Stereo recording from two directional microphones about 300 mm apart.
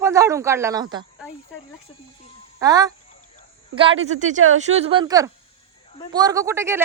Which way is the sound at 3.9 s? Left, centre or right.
Right.